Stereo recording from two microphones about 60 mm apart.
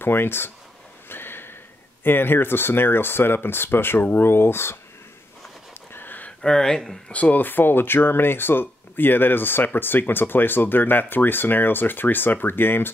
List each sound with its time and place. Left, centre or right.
0.0 s speech: left
1.0 s a sound: left
2.0 s speech: left
5.9 s a sound: left
6.4 s speech: centre
7.1 s speech: left